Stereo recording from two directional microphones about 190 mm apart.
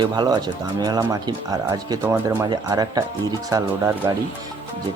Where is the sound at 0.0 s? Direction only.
20° right (ahead or behind).